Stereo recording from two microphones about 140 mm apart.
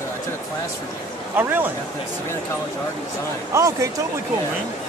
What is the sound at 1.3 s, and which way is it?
Speech, 15° right (ahead or behind).